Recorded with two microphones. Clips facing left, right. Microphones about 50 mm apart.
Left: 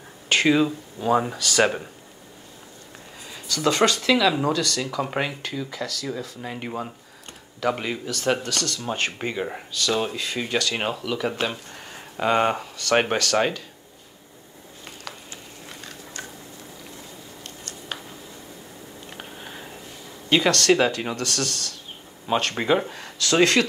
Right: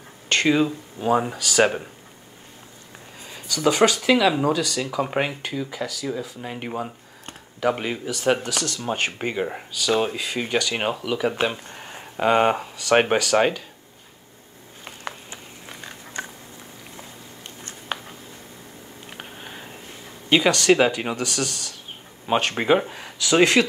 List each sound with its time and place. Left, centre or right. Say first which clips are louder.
0.3 s speech: even; centre
3.3 s speech: right 2 dB; centre
15.8 s biting: right 5 dB; right
19.0 s a sound: right 1 dB; centre
20.2 s speech: right 2 dB; centre